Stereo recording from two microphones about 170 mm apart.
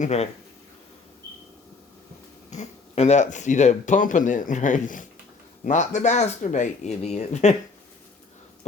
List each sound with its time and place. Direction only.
0.0 s speech: 40° left (ahead or behind)
2.5 s speech: 40° left (ahead or behind)